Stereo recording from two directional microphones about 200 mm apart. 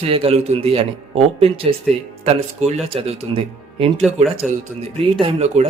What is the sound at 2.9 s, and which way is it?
Speech, 30° right (ahead or behind).